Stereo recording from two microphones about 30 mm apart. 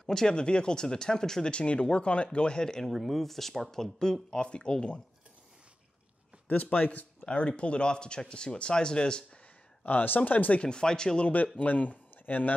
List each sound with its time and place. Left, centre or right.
0.0 s speech: centre
0.3 s speech: left
1.5 s speech: left
2.6 s speech: centre
2.9 s speech: centre; by 4.5 s left
4.5 s speech: left
6.6 s speech: left
7.2 s speech: left
9.8 s speech: left
10.6 s speech: left
11.6 s speech: left